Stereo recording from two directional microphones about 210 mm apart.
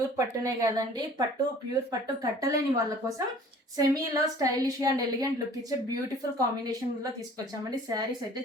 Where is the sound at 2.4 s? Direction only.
15° right (ahead or behind).